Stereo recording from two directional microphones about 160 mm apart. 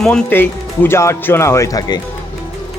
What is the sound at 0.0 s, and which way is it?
Speech, 5° left (ahead or behind).